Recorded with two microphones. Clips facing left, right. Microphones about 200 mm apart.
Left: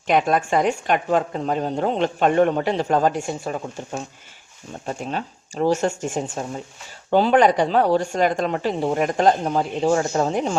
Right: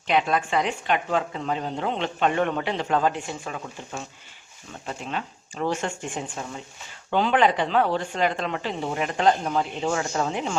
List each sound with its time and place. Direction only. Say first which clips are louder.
0.1 s a woman's voice: left 4 dB; 45° left (ahead or behind)
4.9 s speech: left 4 dB; 40° left (ahead or behind)